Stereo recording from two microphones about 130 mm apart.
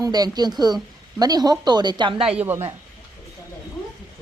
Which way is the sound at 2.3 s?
15° right (ahead or behind).